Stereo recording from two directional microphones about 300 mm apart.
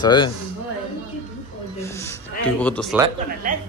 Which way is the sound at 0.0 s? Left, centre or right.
Centre.